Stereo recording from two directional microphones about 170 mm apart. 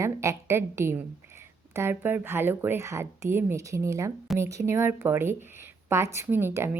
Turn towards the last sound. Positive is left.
turn(degrees=-15)  # may be behind; listen again after turning